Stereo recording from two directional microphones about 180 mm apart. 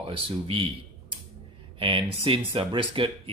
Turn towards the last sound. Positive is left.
turn(degrees=-30)  # may be behind; listen again after turning